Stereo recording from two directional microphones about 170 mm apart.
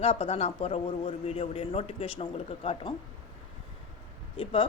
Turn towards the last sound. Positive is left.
turn(degrees=30)  # may be behind; listen again after turning